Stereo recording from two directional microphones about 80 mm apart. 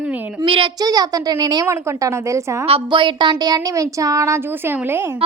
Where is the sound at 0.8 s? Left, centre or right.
Right.